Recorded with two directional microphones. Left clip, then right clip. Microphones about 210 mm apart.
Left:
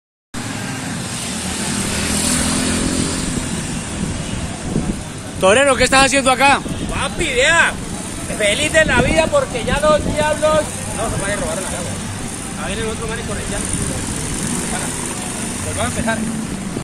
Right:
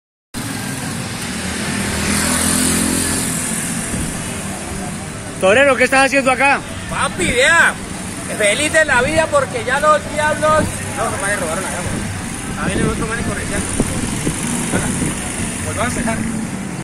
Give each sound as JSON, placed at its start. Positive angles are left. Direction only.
{"t": 2.5, "sound": "vehicle", "side_deg": -50}
{"t": 5.4, "sound": "speech", "side_deg": 20}
{"t": 7.3, "sound": "speech", "side_deg": 0}